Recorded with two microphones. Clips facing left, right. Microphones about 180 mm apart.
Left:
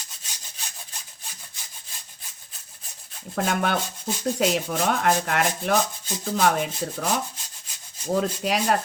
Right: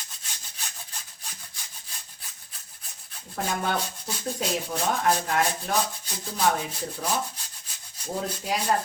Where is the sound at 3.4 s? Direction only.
70° left (ahead or behind).